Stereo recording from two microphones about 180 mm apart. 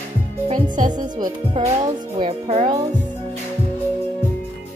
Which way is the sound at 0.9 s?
25° right (ahead or behind).